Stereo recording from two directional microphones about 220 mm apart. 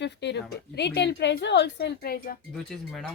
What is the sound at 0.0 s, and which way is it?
Speech, 50° left (ahead or behind).